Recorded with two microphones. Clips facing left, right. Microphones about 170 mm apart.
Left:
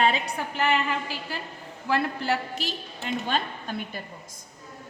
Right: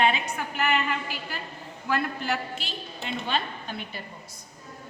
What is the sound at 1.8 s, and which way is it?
A woman's voice, 30° left (ahead or behind).